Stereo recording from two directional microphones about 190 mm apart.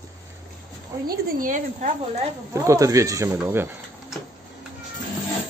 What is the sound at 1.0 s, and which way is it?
Speech, 50° right (ahead or behind).